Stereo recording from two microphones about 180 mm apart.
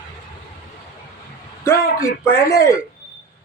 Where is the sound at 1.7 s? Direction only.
15° left (ahead or behind).